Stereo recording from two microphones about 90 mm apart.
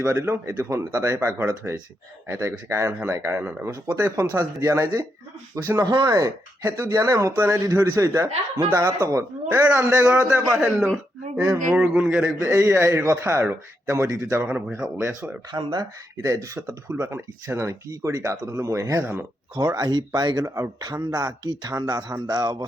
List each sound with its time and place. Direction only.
0.0 s speech: 30° right (ahead or behind)
5.8 s speech: 50° right (ahead or behind)
9.5 s a man's voice: 20° right (ahead or behind)
12.4 s speech: 30° right (ahead or behind)
14.4 s speech: 20° right (ahead or behind)
15.5 s speech: 55° right (ahead or behind)
16.2 s speech: 35° right (ahead or behind)
19.5 s speech: 50° right (ahead or behind)